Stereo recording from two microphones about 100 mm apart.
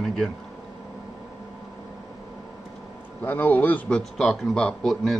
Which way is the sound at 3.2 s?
20° left (ahead or behind).